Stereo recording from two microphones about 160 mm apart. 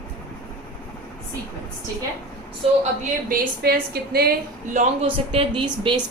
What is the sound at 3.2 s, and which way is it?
A woman's voice, 75° right (ahead or behind).